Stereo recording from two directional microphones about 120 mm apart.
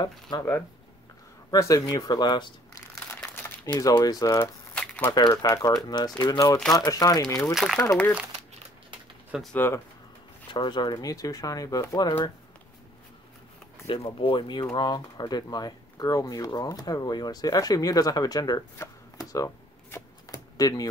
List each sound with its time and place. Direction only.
1.5 s speech: 25° left (ahead or behind)
3.1 s crumpling: 15° left (ahead or behind)
3.8 s speech: 30° left (ahead or behind)
4.7 s crumpling: 10° left (ahead or behind)
5.4 s speech: 30° left (ahead or behind)
7.5 s speech: centre (ahead or behind)
7.8 s speech: 20° left (ahead or behind)
9.5 s speech: 15° left (ahead or behind)
10.5 s speech: 40° left (ahead or behind)
13.8 s speech: 50° left (ahead or behind); by 20.9 s 30° left (ahead or behind)